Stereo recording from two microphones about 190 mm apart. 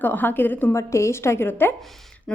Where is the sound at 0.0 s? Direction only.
10° left (ahead or behind).